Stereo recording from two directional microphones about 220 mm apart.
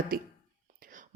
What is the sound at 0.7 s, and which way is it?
Whispering, 40° right (ahead or behind).